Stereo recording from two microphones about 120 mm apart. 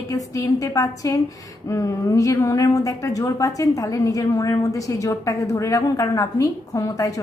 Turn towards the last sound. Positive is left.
turn(degrees=30)  # may be behind; listen again after turning